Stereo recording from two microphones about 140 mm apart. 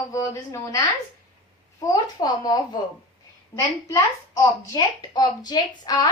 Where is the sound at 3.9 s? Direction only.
25° left (ahead or behind).